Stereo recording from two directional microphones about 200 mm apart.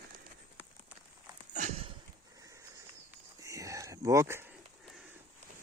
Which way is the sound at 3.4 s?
15° right (ahead or behind).